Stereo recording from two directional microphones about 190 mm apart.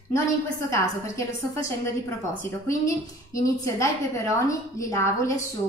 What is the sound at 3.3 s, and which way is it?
A woman's voice, 15° left (ahead or behind).